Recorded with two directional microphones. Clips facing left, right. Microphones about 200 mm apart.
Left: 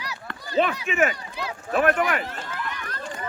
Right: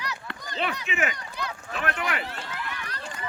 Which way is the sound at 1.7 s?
50° left (ahead or behind).